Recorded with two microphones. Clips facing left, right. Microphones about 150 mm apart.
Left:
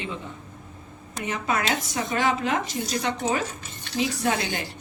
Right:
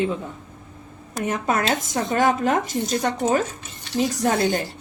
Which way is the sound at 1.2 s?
50° right (ahead or behind).